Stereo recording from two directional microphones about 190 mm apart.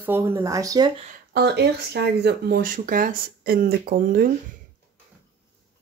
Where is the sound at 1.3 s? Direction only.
60° right (ahead or behind).